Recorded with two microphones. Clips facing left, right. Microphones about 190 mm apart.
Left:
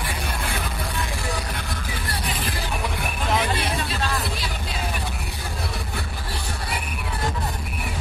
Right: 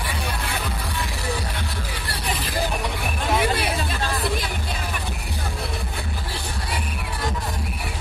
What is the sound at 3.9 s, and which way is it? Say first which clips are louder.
Music: right 2 dB; 50° right (ahead or behind).